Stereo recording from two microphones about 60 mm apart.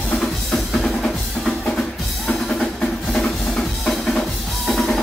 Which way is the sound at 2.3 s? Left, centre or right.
Centre.